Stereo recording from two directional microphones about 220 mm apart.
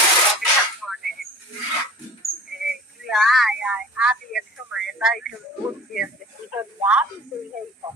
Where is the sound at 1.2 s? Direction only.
40° left (ahead or behind).